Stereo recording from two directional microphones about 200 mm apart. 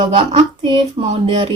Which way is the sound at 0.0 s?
25° right (ahead or behind).